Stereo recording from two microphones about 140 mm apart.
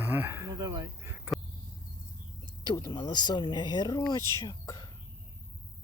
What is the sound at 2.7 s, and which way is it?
Speech, 25° left (ahead or behind).